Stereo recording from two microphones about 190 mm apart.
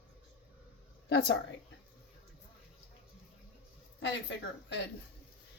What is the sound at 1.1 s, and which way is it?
Speech, 60° left (ahead or behind).